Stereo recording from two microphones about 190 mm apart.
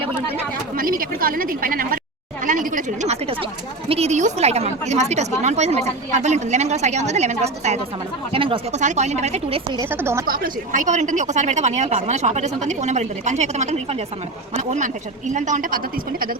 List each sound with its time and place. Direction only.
0.8 s a woman's voice: 50° right (ahead or behind)
9.7 s a woman's voice: 10° right (ahead or behind)
10.2 s a woman's voice: 50° right (ahead or behind)